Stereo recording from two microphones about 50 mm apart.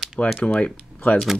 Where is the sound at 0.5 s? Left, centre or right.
Left.